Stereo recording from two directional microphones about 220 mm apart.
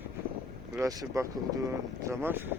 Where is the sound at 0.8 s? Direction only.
15° right (ahead or behind).